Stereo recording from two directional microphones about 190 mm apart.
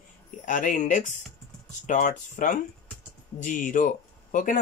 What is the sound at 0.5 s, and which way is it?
Speech, 45° left (ahead or behind).